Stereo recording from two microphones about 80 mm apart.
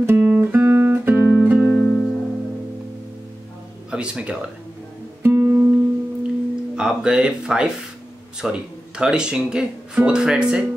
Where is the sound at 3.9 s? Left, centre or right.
Centre.